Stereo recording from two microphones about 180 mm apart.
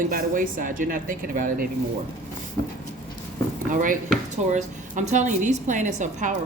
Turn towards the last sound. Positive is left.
turn(degrees=-45)  # may be behind; listen again after turning